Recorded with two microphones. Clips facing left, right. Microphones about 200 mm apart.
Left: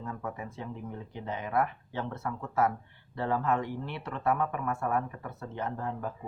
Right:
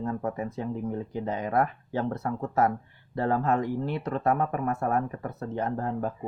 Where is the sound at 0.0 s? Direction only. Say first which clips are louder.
Right 8 dB; 40° right (ahead or behind).